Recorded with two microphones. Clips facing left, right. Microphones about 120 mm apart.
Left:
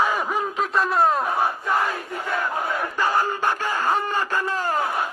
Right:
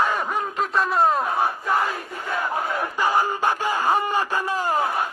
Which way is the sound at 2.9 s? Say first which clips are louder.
Right 1 dB; 15° right (ahead or behind).